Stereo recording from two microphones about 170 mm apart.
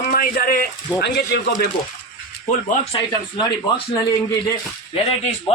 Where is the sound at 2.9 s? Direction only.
25° left (ahead or behind).